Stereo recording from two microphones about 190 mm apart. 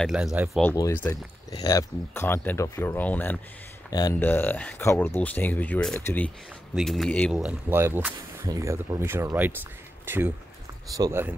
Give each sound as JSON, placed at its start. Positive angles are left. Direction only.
{"t": 0.0, "sound": "speech", "side_deg": -5}
{"t": 0.7, "sound": "speech", "side_deg": 15}
{"t": 7.3, "sound": "speech", "side_deg": -10}